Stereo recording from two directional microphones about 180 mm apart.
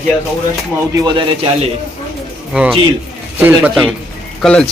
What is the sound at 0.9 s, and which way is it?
Speech, 25° right (ahead or behind).